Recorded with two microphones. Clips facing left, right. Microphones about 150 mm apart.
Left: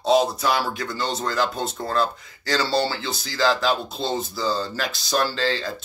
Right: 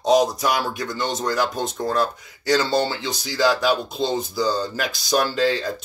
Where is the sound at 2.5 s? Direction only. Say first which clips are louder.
Right 3 dB; 20° right (ahead or behind).